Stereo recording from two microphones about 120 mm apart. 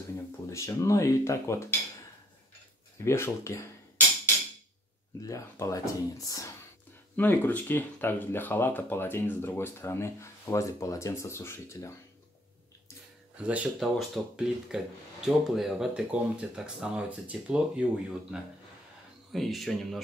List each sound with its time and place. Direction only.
0.5 s speech: 25° left (ahead or behind)
3.0 s speech: 20° left (ahead or behind)
5.2 s speech: 25° left (ahead or behind)
7.2 s speech: 15° left (ahead or behind)
13.4 s speech: 10° right (ahead or behind)
13.7 s speech: centre (ahead or behind)
19.3 s speech: centre (ahead or behind)